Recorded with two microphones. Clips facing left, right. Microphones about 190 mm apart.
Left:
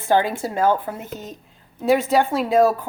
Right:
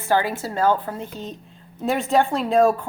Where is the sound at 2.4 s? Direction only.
5° left (ahead or behind).